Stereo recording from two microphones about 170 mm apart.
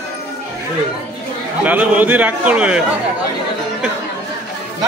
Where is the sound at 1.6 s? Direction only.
10° right (ahead or behind).